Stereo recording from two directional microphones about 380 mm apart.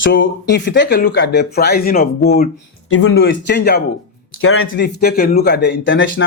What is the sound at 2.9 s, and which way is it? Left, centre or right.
Speech, left.